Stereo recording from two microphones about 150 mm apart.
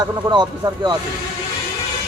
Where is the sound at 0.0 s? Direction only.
25° right (ahead or behind).